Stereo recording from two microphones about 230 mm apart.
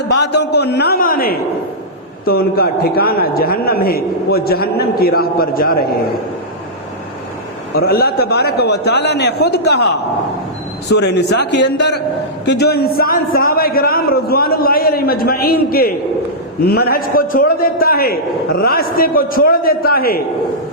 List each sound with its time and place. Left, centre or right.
0.1 s a sound: left
2.2 s speech: left
7.8 s a man's voice: left
10.8 s a man's voice: left